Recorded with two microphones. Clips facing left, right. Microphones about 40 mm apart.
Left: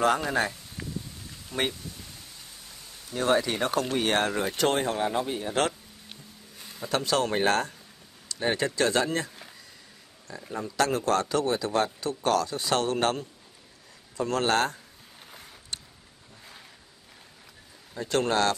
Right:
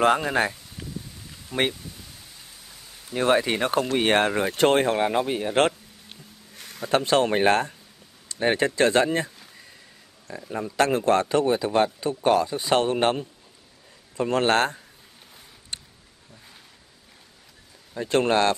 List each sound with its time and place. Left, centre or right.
0.0 s a man's voice: right
3.1 s speech: right
6.8 s speech: right
10.5 s a man's voice: right
17.9 s speech: right